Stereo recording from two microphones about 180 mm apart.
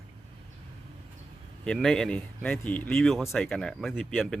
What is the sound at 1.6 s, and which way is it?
Speech, 5° left (ahead or behind).